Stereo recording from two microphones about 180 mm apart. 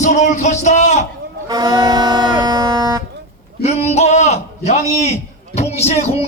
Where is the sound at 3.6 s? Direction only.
35° left (ahead or behind).